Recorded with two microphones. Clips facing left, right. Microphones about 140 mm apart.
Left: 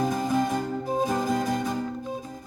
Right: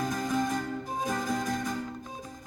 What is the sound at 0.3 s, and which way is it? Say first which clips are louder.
Music: left 4 dB; 45° left (ahead or behind).